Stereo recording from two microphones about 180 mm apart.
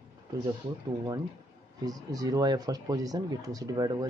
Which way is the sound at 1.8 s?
20° right (ahead or behind).